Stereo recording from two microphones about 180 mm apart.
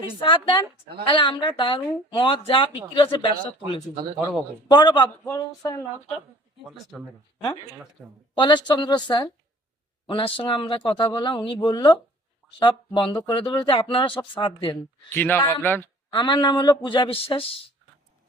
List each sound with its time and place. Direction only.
0.2 s speech: 25° left (ahead or behind)
6.7 s speech: centre (ahead or behind)
8.4 s speech: 25° left (ahead or behind)
15.1 s speech: 10° left (ahead or behind)
16.0 s speech: 25° left (ahead or behind)